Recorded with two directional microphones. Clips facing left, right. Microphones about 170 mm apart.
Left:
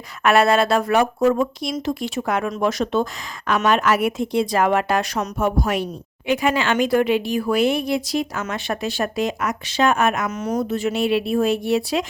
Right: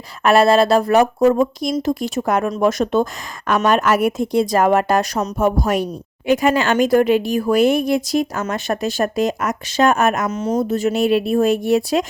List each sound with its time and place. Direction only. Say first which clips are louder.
0.2 s speech: right 3 dB; 35° right (ahead or behind)
10.2 s speech: right 4 dB; 30° right (ahead or behind); by 12.0 s 45° right (ahead or behind)